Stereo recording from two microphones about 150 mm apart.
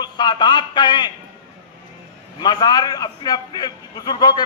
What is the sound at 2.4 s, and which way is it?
A man's voice, 30° left (ahead or behind).